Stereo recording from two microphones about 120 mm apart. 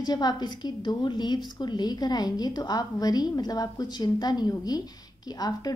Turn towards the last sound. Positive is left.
turn(degrees=30)  # may be behind; listen again after turning